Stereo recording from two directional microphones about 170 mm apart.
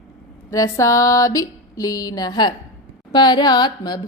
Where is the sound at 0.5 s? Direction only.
20° left (ahead or behind).